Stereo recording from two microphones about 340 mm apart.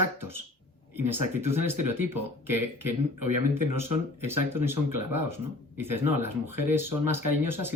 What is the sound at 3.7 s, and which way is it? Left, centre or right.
Speech, right.